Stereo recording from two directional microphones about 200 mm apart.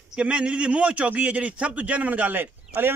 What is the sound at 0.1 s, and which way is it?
A man's voice, 5° right (ahead or behind).